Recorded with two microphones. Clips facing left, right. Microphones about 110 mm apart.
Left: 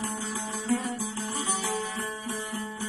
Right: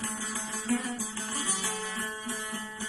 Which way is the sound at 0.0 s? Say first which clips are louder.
Left 4 dB; 20° left (ahead or behind).